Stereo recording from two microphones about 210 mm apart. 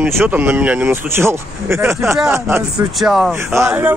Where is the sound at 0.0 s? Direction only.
10° right (ahead or behind).